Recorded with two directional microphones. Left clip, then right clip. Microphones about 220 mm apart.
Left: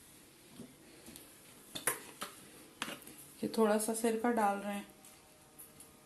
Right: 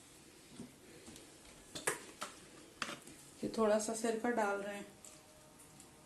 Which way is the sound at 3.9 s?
35° left (ahead or behind).